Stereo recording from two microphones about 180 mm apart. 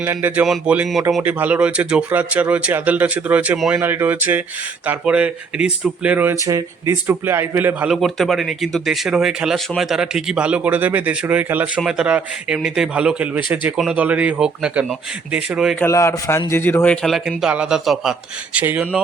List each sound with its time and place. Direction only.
0.0 s a man's voice: 10° right (ahead or behind)
15.8 s a man's voice: 15° left (ahead or behind); by 18.9 s 10° right (ahead or behind)